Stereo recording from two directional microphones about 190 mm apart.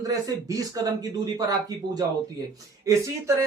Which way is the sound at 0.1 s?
20° right (ahead or behind).